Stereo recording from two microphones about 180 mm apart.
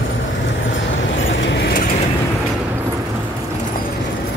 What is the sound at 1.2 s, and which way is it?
Vehicle, 85° left.